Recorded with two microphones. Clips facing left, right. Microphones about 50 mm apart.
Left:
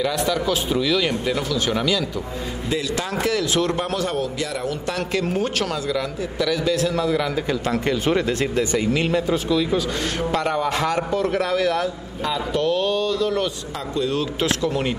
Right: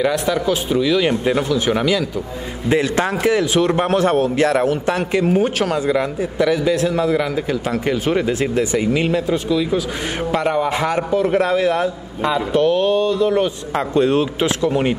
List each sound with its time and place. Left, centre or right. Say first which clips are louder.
0.0 s speech: right 4 dB; right
2.7 s a man's voice: right 8 dB; right
3.3 s speech: right 4 dB; right
3.8 s a man's voice: right 8 dB; right
4.8 s speech: right 5 dB; right
5.2 s speech: right 6 dB; centre
5.9 s speech: right 6 dB; right
6.9 s speech: right 4 dB; centre
13.7 s a man's voice: right 8 dB; right
14.4 s speech: right 4 dB; right